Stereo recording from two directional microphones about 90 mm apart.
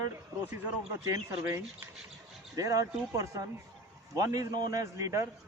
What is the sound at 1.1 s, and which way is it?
A man's voice, 35° right (ahead or behind).